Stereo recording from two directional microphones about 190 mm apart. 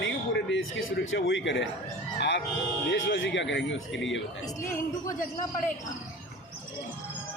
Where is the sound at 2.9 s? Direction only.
70° left (ahead or behind).